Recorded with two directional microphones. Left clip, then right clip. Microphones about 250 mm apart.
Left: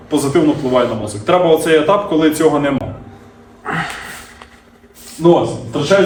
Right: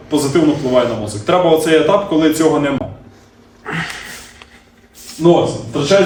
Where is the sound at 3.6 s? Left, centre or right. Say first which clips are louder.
Left 2 dB; centre.